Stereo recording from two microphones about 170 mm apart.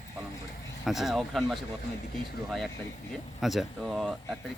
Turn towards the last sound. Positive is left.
turn(degrees=0)  # may be behind; listen again after turning